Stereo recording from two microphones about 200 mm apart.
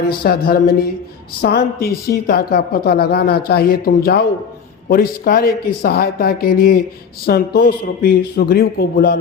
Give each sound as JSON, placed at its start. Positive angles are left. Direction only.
{"t": 0.1, "sound": "a woman's voice", "side_deg": 50}